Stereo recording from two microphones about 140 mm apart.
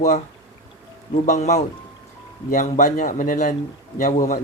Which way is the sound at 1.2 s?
60° left (ahead or behind).